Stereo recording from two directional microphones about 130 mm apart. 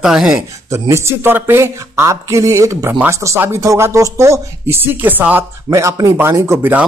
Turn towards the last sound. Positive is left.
turn(degrees=-20)  # may be behind; listen again after turning